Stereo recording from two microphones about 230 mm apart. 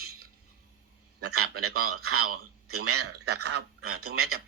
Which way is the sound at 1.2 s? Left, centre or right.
Right.